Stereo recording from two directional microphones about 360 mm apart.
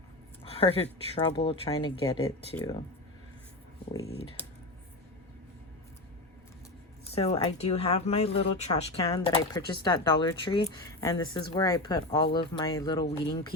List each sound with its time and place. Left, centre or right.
0.4 s speech: centre
3.9 s speech: centre
7.1 s speech: centre